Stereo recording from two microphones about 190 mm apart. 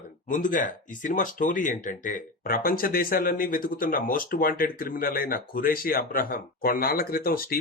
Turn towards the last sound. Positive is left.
turn(degrees=50)  # may be behind; listen again after turning